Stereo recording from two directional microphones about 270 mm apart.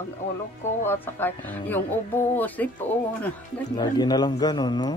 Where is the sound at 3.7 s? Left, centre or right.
Centre.